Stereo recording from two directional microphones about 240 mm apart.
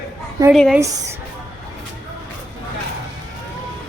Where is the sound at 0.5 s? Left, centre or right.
Centre.